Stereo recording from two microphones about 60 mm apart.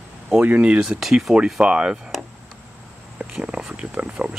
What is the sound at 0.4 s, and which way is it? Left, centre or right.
Speech, right.